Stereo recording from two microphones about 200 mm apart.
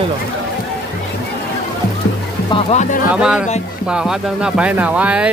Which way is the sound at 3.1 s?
5° right (ahead or behind).